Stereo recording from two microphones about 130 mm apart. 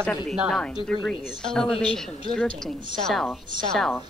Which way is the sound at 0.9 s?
5° left (ahead or behind).